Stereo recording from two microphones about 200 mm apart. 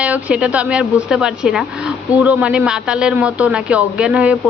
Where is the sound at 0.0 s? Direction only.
5° right (ahead or behind).